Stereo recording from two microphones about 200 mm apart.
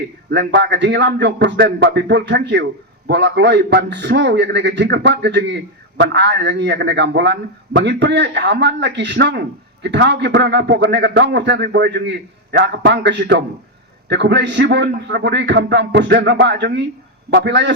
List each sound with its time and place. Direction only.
0.3 s a man's voice: 60° right (ahead or behind)